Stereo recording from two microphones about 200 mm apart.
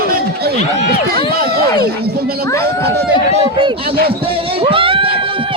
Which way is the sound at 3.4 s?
25° right (ahead or behind).